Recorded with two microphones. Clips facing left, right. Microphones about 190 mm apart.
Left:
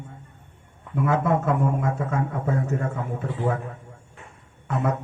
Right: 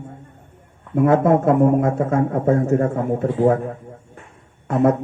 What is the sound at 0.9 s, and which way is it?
Mantra, 45° right (ahead or behind).